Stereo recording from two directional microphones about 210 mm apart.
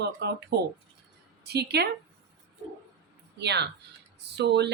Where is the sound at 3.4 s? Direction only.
55° right (ahead or behind).